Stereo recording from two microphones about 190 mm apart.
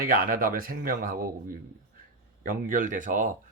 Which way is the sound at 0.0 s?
50° right (ahead or behind).